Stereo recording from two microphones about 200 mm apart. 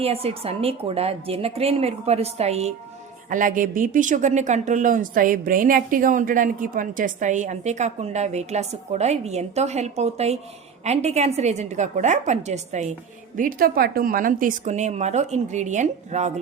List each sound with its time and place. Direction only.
0.0 s a woman's voice: 30° right (ahead or behind)